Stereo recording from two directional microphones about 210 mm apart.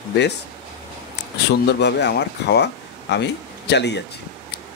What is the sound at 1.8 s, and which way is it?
Speech, 55° left (ahead or behind).